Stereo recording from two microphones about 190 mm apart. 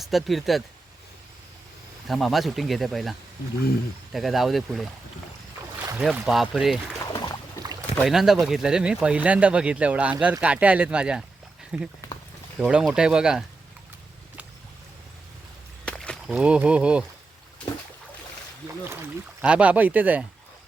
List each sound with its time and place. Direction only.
0.0 s speech: centre (ahead or behind)
2.0 s speech: centre (ahead or behind)
6.0 s speech: centre (ahead or behind)
7.0 s music: 25° left (ahead or behind)
7.9 s speech: centre (ahead or behind)
15.9 s speech: centre (ahead or behind)
19.4 s speech: 5° right (ahead or behind)